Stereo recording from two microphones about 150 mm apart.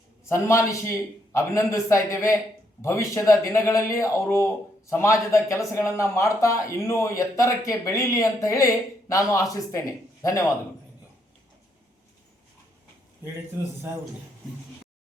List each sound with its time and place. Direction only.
0.3 s speech: 20° left (ahead or behind)